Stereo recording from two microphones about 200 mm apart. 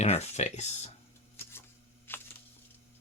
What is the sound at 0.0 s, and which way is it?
Speech, 35° left (ahead or behind).